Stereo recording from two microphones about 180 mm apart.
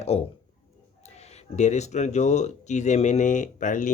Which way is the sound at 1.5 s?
40° left (ahead or behind).